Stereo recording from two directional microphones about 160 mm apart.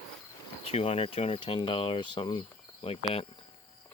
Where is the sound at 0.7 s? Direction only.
40° left (ahead or behind).